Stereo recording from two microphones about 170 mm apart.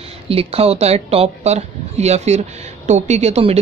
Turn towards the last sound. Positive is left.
turn(degrees=-40)  # may be behind; listen again after turning